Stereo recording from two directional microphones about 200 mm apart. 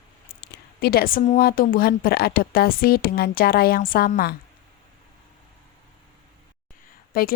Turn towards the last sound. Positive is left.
turn(degrees=45)  # may be behind; listen again after turning